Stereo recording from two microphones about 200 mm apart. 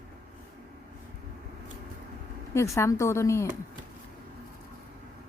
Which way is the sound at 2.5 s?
15° left (ahead or behind).